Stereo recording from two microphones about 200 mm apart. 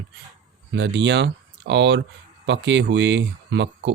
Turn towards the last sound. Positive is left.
turn(degrees=-60)  # may be behind; listen again after turning